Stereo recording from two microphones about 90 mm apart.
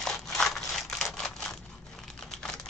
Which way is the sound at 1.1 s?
5° left (ahead or behind).